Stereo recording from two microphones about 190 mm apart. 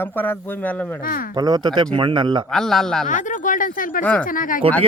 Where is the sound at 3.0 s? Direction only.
40° left (ahead or behind).